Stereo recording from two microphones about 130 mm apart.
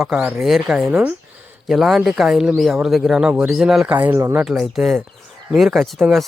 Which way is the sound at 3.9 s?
15° right (ahead or behind).